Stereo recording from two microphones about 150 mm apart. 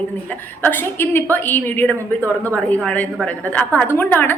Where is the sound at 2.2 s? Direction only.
20° right (ahead or behind).